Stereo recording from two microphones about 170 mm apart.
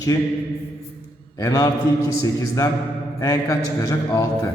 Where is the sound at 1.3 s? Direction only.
20° left (ahead or behind).